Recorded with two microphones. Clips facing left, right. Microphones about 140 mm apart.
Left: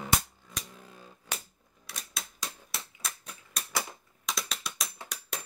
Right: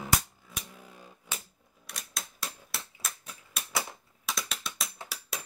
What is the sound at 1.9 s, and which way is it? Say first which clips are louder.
Typewriter: even; centre (ahead or behind).